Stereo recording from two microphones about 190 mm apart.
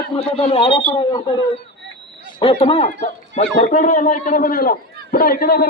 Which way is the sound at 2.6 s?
30° left (ahead or behind).